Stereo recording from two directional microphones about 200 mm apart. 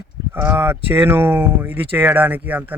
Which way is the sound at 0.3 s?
10° right (ahead or behind).